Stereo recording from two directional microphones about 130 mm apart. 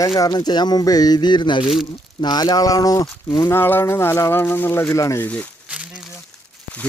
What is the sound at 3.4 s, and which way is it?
Speech, 15° left (ahead or behind).